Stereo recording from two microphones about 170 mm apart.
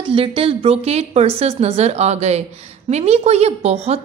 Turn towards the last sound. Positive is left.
turn(degrees=-40)  # may be behind; listen again after turning